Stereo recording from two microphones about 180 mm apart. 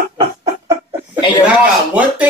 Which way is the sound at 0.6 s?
10° right (ahead or behind).